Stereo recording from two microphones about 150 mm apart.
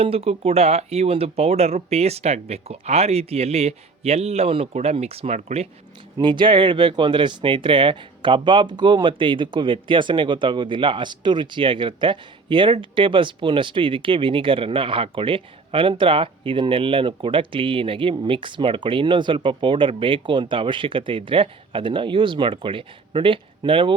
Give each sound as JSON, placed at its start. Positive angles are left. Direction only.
{"t": 0.0, "sound": "speech", "side_deg": -40}
{"t": 6.1, "sound": "speech", "side_deg": -30}